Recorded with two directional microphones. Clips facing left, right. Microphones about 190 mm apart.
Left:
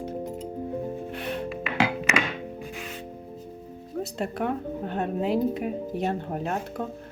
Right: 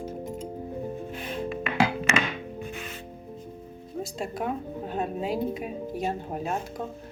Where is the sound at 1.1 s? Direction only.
70° left (ahead or behind).